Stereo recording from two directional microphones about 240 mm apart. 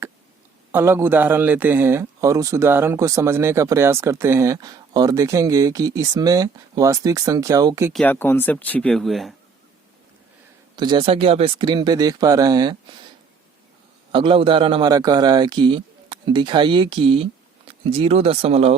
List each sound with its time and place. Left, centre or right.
0.7 s a man's voice: centre
7.9 s speech: centre
10.8 s a man's voice: centre
14.1 s a man's voice: right